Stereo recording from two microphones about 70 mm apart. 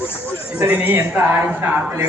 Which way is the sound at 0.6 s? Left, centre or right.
Right.